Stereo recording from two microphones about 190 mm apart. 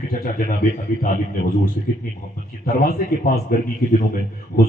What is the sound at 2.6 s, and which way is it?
Speech, 50° left (ahead or behind).